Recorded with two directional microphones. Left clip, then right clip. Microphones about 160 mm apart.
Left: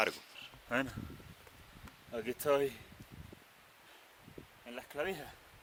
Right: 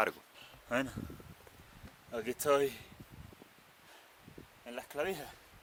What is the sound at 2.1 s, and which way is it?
Speech, 20° left (ahead or behind).